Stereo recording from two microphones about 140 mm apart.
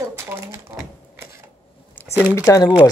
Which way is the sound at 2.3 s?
20° left (ahead or behind).